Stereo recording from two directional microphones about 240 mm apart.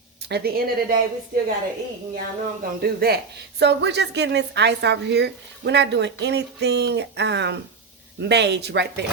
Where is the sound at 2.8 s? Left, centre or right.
Right.